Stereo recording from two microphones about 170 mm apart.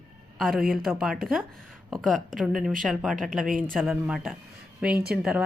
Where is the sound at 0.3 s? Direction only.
Centre (ahead or behind).